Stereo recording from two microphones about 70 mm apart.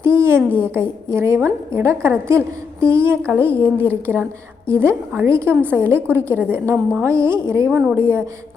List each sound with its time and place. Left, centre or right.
0.0 s a woman's voice: right